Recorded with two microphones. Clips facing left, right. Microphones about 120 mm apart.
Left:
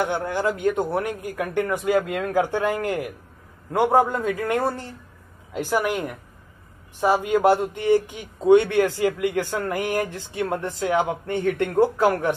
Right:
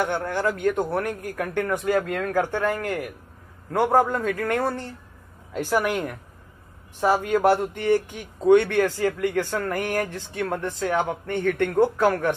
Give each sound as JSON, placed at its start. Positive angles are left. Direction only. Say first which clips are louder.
{"t": 0.0, "sound": "speech", "louder": "left 1 dB", "side_deg": 10}
{"t": 3.7, "sound": "speech", "louder": "left 1 dB", "side_deg": 5}